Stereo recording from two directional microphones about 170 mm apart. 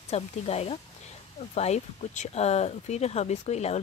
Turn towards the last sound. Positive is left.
turn(degrees=40)  # may be behind; listen again after turning